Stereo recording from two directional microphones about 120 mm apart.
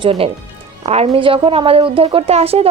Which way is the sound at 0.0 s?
50° right (ahead or behind).